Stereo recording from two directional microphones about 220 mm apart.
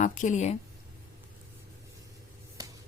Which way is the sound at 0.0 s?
35° left (ahead or behind).